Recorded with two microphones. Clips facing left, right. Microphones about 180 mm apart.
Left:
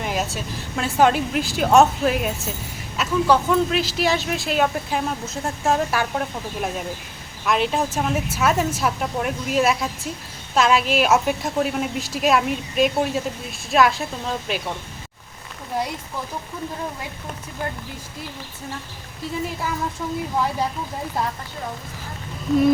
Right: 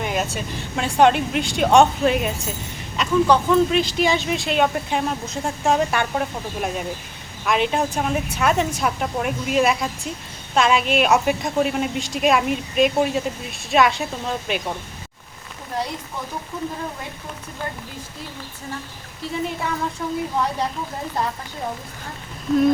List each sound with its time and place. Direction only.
0.0 s a woman's voice: centre (ahead or behind)
20.0 s a woman's voice: centre (ahead or behind)
21.2 s a woman's voice: 5° left (ahead or behind)